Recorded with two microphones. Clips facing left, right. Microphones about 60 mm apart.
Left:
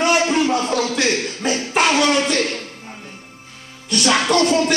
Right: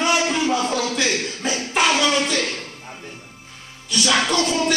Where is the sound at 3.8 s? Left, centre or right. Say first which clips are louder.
Left 3 dB; left.